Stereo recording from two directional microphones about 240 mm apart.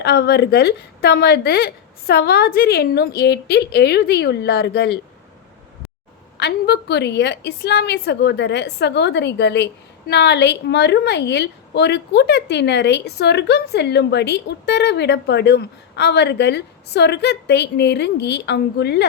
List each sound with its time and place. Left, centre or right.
0.0 s a woman's voice: left
6.3 s a woman's voice: left